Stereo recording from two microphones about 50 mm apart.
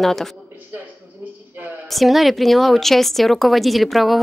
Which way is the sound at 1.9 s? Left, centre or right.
Centre.